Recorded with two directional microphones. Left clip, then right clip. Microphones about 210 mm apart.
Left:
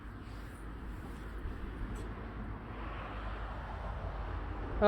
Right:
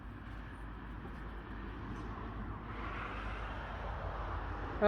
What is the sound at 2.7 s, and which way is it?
Vehicle, 55° right (ahead or behind).